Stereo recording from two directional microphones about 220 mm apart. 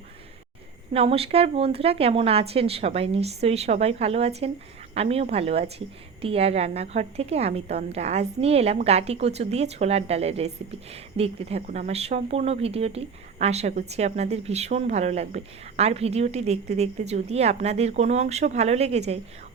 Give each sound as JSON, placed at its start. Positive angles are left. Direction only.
{"t": 0.9, "sound": "speech", "side_deg": -25}